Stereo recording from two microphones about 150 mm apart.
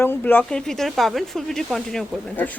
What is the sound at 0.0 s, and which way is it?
Speech, 15° left (ahead or behind).